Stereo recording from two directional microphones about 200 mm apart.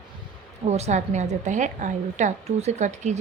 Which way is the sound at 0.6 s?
35° right (ahead or behind).